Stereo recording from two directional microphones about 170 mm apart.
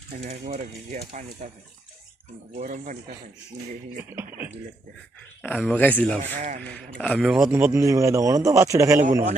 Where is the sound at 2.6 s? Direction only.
50° right (ahead or behind).